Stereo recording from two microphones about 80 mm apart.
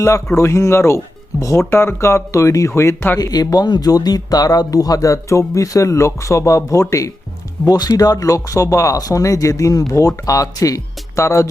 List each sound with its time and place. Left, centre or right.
0.0 s speech: left
3.2 s speech: left